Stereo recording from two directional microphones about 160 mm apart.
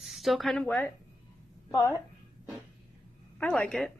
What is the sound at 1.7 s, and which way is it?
Speech, 20° left (ahead or behind).